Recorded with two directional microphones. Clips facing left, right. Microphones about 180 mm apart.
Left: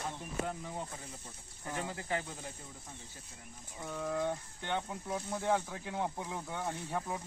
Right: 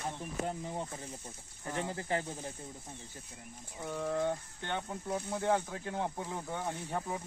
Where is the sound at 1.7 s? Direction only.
25° right (ahead or behind).